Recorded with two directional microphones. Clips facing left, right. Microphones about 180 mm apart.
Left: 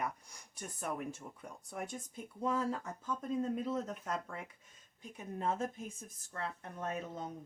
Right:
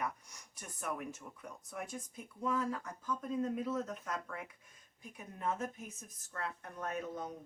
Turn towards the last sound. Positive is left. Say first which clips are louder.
# even
turn(degrees=25)  # may be behind; listen again after turning